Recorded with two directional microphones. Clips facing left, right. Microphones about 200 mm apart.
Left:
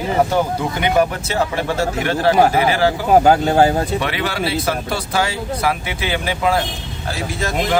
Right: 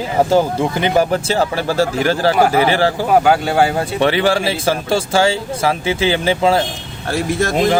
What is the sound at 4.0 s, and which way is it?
Speech, 30° right (ahead or behind).